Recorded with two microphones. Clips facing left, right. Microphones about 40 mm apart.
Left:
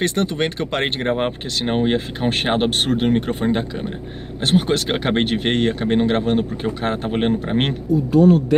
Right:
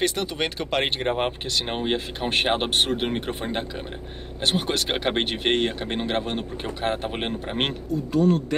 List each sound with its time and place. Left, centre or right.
0.3 s speech: centre
1.0 s speech: centre